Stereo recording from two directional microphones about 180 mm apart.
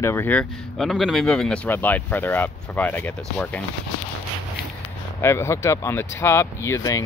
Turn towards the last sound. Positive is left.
turn(degrees=20)  # may be behind; listen again after turning